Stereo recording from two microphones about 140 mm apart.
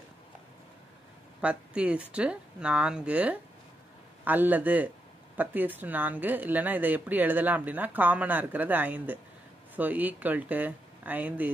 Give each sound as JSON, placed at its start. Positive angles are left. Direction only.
{"t": 1.4, "sound": "speech", "side_deg": -10}